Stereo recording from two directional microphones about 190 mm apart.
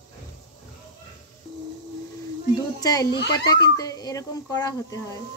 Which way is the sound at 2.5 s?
20° left (ahead or behind).